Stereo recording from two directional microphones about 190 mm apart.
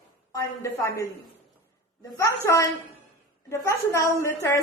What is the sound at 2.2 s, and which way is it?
A woman's voice, 15° left (ahead or behind).